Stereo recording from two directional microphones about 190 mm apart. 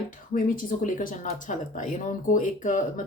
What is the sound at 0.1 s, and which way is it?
Speech, 45° left (ahead or behind).